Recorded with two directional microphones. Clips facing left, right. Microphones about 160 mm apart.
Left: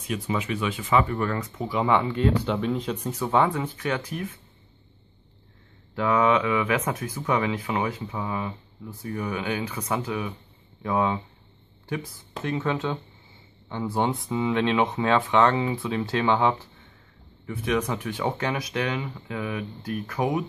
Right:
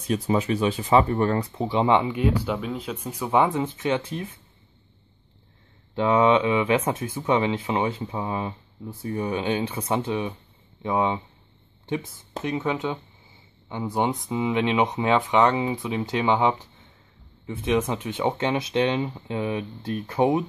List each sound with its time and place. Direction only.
0.0 s speech: 35° right (ahead or behind)
5.9 s speech: 25° right (ahead or behind)